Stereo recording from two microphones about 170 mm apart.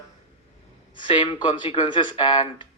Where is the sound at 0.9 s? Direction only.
30° left (ahead or behind).